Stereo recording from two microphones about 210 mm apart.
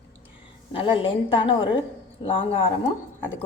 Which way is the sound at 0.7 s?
25° left (ahead or behind).